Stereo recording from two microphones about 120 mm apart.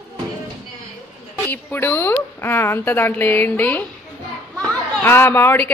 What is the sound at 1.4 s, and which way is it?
A woman's voice, 15° left (ahead or behind).